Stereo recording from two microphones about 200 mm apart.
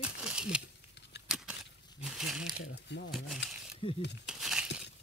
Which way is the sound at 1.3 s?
5° right (ahead or behind).